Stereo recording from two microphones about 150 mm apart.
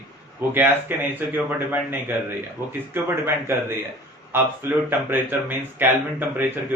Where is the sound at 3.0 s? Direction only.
15° right (ahead or behind).